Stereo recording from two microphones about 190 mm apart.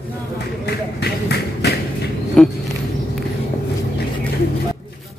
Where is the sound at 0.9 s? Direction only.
60° left (ahead or behind).